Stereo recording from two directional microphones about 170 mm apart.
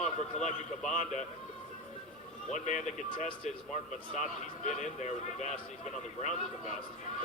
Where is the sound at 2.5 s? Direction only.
45° left (ahead or behind).